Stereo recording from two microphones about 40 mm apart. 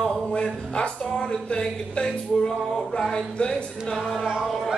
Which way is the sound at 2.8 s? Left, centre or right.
Centre.